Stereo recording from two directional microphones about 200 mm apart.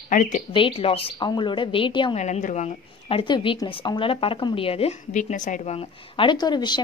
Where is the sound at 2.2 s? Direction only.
35° left (ahead or behind).